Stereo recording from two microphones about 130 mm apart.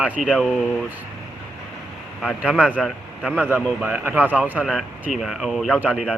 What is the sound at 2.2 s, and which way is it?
A man's voice, 5° right (ahead or behind).